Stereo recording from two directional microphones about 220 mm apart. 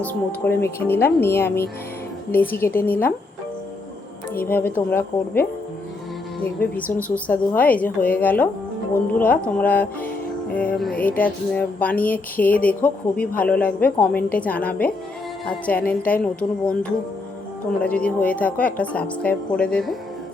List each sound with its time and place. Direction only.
0.0 s speech: 5° left (ahead or behind)
4.4 s speech: 10° left (ahead or behind)
17.8 s speech: 5° left (ahead or behind)